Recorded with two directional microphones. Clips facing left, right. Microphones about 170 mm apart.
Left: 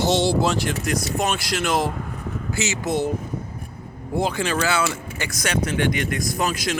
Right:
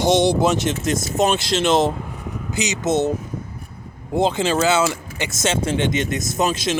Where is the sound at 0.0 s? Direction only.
15° right (ahead or behind).